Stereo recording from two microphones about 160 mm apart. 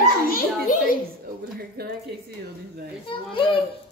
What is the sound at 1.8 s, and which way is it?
Speech, 75° right (ahead or behind).